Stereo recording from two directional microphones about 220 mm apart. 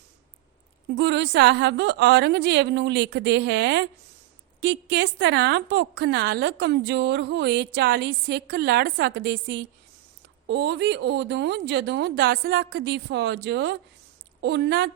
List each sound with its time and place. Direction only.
0.9 s a woman's voice: 55° right (ahead or behind)